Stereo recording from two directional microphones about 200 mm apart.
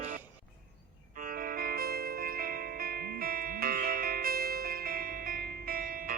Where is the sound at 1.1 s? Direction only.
45° right (ahead or behind).